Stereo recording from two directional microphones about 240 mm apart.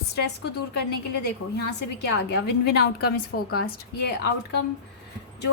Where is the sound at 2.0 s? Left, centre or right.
Left.